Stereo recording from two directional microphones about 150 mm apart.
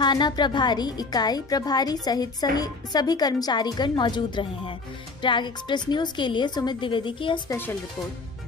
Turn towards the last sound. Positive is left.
turn(degrees=15)  # may be behind; listen again after turning